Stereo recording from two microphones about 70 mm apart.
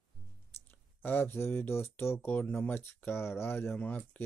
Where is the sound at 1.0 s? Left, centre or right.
Left.